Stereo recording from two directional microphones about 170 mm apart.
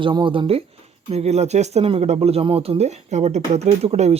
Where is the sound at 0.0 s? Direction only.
30° right (ahead or behind).